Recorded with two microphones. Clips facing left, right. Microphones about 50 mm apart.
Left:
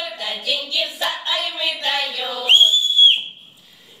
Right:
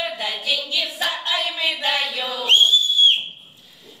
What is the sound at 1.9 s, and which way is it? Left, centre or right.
Child singing, centre.